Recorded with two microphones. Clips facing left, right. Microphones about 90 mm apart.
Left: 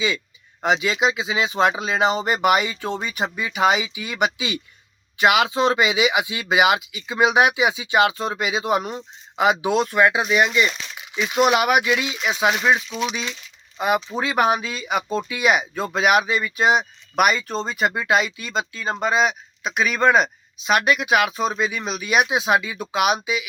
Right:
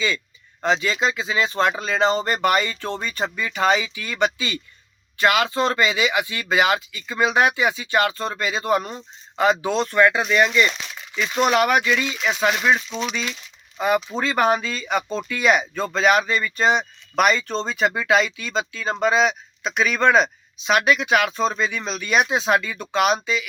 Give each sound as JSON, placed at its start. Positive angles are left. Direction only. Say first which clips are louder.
{"t": 0.6, "sound": "speech", "louder": "left 1 dB", "side_deg": 15}